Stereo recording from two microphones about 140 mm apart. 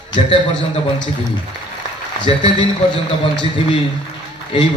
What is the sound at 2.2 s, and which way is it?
Speech, 35° left (ahead or behind).